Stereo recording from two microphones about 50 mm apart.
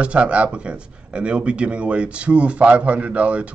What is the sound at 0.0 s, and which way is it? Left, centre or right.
Speech, right.